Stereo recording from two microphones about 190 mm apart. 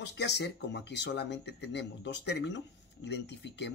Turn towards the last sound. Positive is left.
turn(degrees=65)  # may be behind; listen again after turning